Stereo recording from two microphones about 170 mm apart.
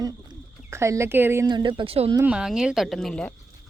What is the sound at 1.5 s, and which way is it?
Speech, 25° right (ahead or behind).